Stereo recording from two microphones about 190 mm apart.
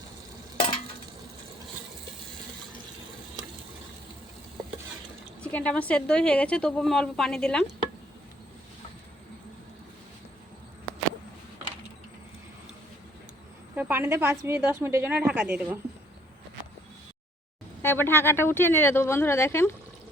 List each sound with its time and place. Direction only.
5.4 s a woman's voice: 5° left (ahead or behind)
13.7 s a woman's voice: 10° right (ahead or behind)
17.8 s a woman's voice: 10° left (ahead or behind)